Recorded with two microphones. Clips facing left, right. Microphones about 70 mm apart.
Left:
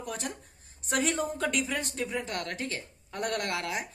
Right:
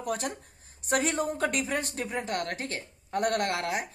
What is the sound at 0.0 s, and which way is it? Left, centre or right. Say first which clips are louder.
A woman's voice: right 5 dB; right.